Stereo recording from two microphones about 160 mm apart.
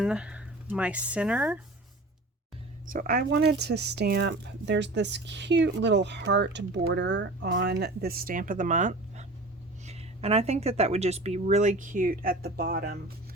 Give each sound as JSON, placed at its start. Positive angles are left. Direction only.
{"t": 0.0, "sound": "speech", "side_deg": -5}
{"t": 2.8, "sound": "speech", "side_deg": -60}